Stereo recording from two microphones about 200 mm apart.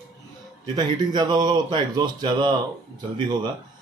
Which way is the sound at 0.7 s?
20° right (ahead or behind).